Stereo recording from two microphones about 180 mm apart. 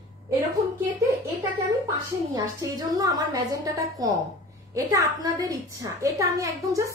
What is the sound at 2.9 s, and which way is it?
A child's voice, 20° right (ahead or behind).